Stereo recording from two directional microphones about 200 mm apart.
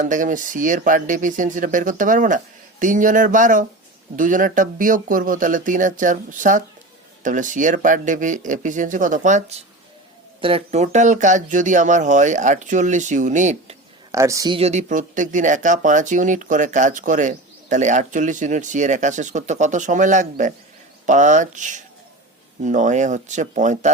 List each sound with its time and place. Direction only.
0.0 s speech: 40° right (ahead or behind)
14.1 s speech: 15° right (ahead or behind); by 23.9 s 40° right (ahead or behind)